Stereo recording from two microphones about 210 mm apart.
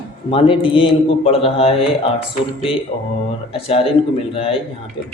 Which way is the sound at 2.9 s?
30° left (ahead or behind).